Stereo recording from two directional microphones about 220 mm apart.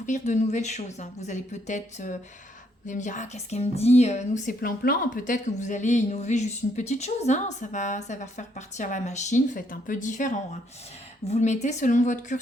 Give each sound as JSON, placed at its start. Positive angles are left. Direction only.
{"t": 0.0, "sound": "a woman's voice", "side_deg": 35}